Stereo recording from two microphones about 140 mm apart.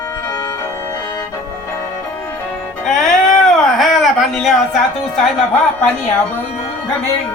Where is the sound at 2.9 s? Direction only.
5° left (ahead or behind).